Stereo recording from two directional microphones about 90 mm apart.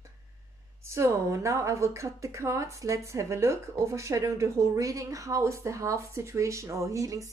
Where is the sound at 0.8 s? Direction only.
30° right (ahead or behind).